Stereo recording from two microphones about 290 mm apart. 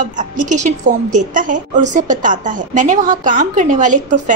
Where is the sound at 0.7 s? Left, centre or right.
Right.